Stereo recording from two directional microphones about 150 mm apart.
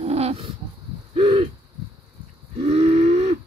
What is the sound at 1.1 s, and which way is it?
Hoot, 40° right (ahead or behind).